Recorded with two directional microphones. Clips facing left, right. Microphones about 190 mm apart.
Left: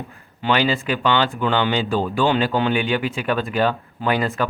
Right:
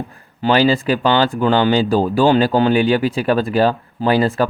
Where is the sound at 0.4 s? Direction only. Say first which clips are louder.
Right 6 dB; 35° right (ahead or behind).